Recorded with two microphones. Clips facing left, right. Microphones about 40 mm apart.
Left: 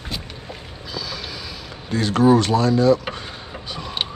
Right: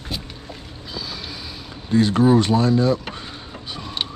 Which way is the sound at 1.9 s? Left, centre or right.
Left.